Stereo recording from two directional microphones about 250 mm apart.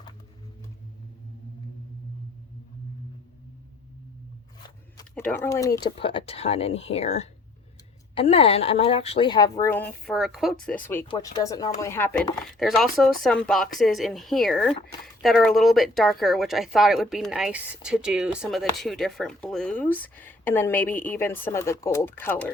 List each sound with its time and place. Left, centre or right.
4.9 s speech: centre
10.8 s speech: centre